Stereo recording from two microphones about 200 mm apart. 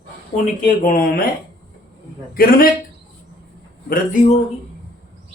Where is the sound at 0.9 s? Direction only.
50° left (ahead or behind).